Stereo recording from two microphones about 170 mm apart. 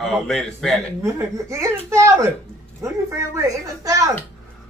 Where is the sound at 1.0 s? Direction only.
15° right (ahead or behind).